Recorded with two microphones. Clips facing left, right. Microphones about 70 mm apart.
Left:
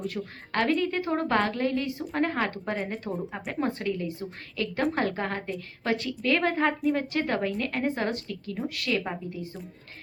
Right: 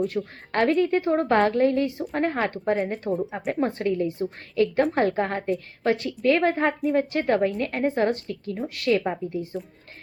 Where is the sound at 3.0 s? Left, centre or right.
Centre.